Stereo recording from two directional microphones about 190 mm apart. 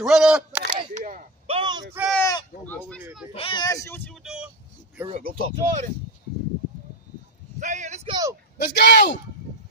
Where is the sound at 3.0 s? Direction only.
5° right (ahead or behind).